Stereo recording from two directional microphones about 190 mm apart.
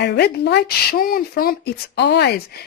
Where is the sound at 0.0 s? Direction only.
60° left (ahead or behind).